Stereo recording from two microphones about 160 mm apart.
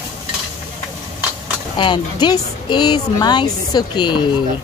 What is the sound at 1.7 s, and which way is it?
A woman's voice, 30° left (ahead or behind).